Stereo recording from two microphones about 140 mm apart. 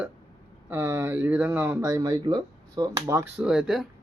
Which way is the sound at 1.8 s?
25° right (ahead or behind).